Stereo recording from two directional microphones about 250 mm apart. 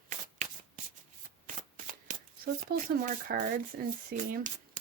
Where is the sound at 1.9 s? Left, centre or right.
Right.